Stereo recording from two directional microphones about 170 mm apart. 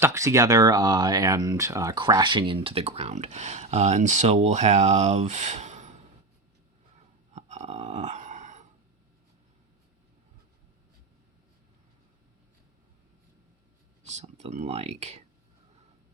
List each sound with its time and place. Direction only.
0.0 s speech: 15° right (ahead or behind); by 6.0 s 45° right (ahead or behind)
7.3 s dog: 40° right (ahead or behind)
14.0 s speech: 45° right (ahead or behind)